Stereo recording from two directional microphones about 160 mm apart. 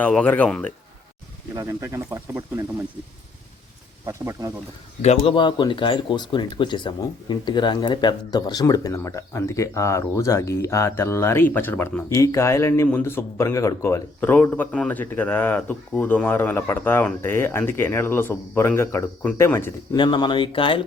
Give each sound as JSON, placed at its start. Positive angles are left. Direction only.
{"t": 0.0, "sound": "speech", "side_deg": 10}
{"t": 1.5, "sound": "speech", "side_deg": -20}
{"t": 4.0, "sound": "speech", "side_deg": -20}
{"t": 5.0, "sound": "speech", "side_deg": 35}
{"t": 20.0, "sound": "speech", "side_deg": 30}